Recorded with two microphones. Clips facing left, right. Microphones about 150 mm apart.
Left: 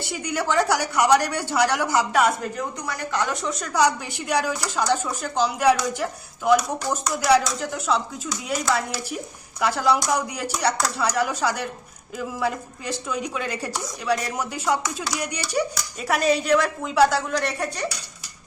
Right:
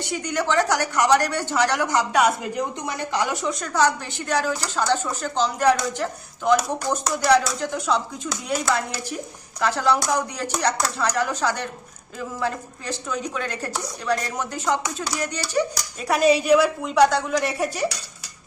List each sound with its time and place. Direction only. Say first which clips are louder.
0.1 s a woman's voice: right 1 dB; 10° left (ahead or behind)
2.6 s a woman's voice: right 2 dB; 20° right (ahead or behind)
3.5 s a woman's voice: left 2 dB; centre (ahead or behind)
16.0 s speech: right 3 dB; centre (ahead or behind)
17.3 s a woman's voice: right 2 dB; 10° right (ahead or behind)